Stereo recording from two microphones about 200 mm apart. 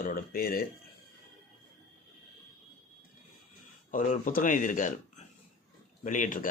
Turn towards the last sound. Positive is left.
turn(degrees=40)  # may be behind; listen again after turning